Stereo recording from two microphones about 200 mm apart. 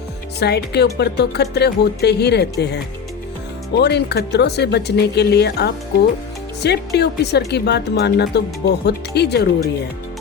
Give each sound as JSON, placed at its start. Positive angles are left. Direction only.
{"t": 0.3, "sound": "speech", "side_deg": 55}